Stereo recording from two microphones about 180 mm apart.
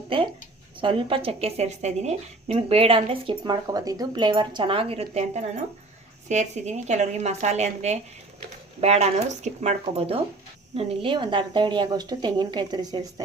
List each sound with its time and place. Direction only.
0.1 s a woman's voice: 30° right (ahead or behind)